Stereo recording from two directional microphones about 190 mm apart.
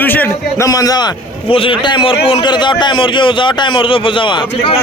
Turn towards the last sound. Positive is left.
turn(degrees=25)  # may be behind; listen again after turning